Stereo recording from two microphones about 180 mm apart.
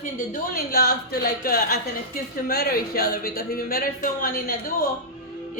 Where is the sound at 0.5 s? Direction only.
60° left (ahead or behind).